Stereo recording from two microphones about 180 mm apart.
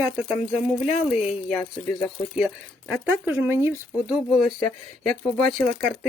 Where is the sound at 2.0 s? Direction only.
Centre (ahead or behind).